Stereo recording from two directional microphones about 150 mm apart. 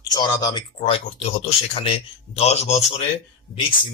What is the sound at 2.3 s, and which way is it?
Speech, 45° left (ahead or behind).